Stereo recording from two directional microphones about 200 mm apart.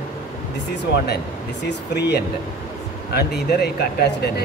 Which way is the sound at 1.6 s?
55° left (ahead or behind).